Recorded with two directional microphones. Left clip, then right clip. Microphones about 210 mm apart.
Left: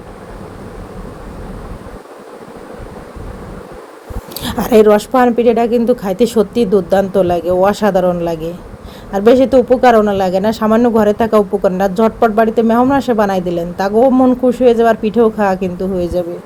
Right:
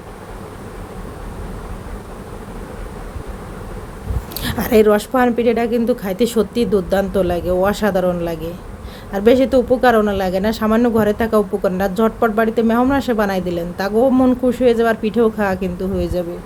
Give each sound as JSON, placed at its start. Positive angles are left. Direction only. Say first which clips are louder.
{"t": 4.4, "sound": "speech", "louder": "left 4 dB", "side_deg": 5}